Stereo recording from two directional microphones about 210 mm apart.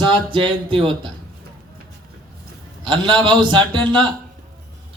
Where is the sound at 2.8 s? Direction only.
20° right (ahead or behind).